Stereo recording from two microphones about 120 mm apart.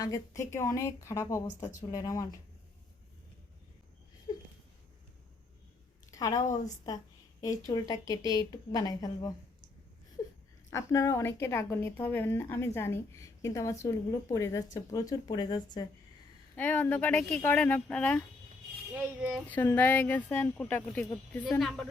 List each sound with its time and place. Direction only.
0.0 s a woman's voice: 25° left (ahead or behind)
6.1 s a woman's voice: 30° left (ahead or behind)
10.7 s a woman's voice: 25° left (ahead or behind)
16.6 s speech: 15° left (ahead or behind)
18.9 s speech: 15° right (ahead or behind)
19.7 s a woman's voice: 15° left (ahead or behind)